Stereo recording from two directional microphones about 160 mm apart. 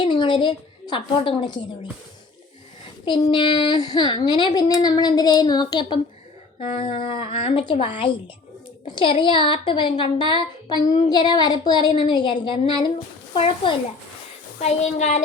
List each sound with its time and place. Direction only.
0.0 s a woman's voice: 30° left (ahead or behind)
3.0 s speech: 30° left (ahead or behind)
14.6 s a woman's voice: 45° left (ahead or behind)